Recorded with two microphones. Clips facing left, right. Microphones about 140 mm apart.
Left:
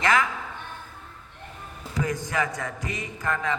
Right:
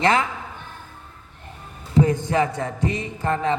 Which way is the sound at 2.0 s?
30° right (ahead or behind).